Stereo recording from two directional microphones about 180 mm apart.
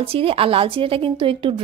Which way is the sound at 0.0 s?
30° right (ahead or behind).